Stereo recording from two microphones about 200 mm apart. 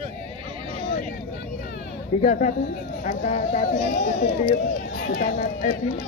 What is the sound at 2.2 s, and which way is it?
Speech, 40° left (ahead or behind).